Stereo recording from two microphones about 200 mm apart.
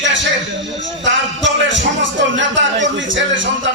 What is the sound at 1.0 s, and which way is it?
Music, 65° right (ahead or behind).